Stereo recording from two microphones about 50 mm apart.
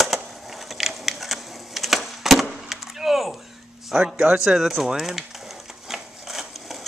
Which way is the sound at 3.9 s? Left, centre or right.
Centre.